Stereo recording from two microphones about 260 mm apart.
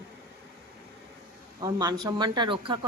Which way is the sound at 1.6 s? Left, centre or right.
Centre.